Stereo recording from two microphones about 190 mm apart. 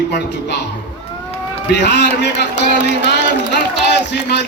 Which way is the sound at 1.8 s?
65° left (ahead or behind).